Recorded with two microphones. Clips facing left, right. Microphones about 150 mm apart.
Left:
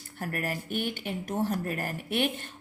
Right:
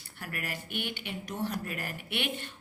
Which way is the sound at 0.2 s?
40° left (ahead or behind).